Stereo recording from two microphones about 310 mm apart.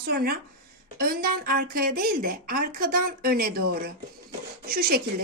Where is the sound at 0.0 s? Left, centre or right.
Right.